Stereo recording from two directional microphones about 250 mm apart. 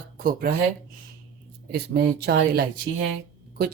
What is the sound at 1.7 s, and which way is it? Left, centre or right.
Speech, right.